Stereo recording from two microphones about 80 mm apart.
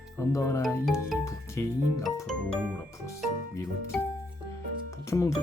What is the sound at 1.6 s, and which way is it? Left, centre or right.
Speech, left.